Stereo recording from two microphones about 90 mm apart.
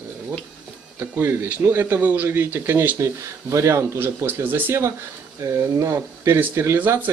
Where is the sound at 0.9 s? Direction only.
25° right (ahead or behind).